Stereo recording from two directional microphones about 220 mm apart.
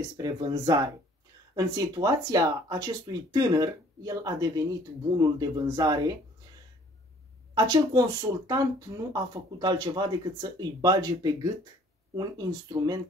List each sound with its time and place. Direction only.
0.2 s speech: 20° right (ahead or behind)
7.5 s speech: 15° right (ahead or behind)